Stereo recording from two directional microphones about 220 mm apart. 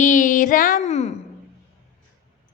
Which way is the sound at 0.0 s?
35° left (ahead or behind).